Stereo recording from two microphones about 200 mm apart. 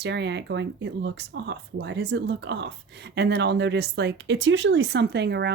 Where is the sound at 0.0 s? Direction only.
60° right (ahead or behind).